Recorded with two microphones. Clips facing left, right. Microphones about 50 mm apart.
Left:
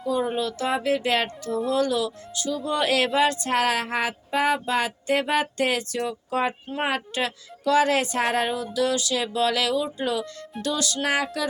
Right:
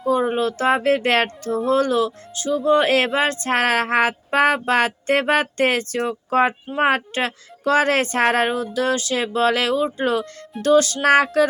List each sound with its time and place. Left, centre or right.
0.1 s speech: right